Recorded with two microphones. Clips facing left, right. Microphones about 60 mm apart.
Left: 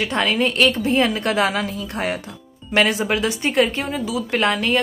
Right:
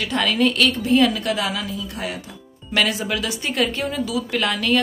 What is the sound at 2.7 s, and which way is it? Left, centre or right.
A woman's voice, left.